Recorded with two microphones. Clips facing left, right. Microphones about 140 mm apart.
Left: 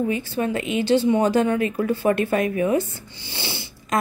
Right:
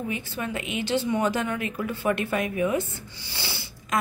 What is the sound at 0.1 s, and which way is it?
A woman's voice, 35° left (ahead or behind).